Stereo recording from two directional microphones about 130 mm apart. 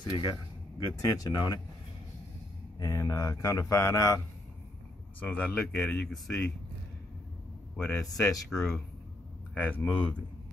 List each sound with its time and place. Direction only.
0.0 s speech: 35° left (ahead or behind)
2.8 s speech: 25° left (ahead or behind)
5.2 s speech: 10° left (ahead or behind)
7.7 s a man's voice: 5° left (ahead or behind)